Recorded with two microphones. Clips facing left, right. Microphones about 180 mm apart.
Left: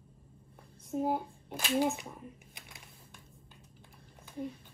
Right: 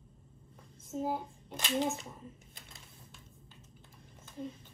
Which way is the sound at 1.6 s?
Centre (ahead or behind).